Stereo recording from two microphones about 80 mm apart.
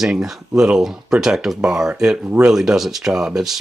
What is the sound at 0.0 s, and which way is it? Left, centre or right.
Speech, centre.